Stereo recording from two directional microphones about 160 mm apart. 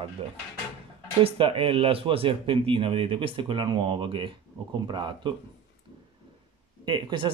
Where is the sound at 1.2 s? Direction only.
35° right (ahead or behind).